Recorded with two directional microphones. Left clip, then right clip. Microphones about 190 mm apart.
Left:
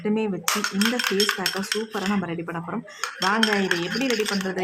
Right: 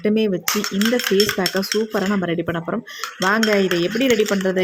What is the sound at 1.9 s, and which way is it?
Cutlery, 30° right (ahead or behind).